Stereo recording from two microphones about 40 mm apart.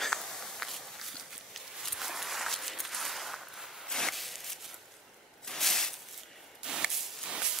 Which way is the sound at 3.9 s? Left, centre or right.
Centre.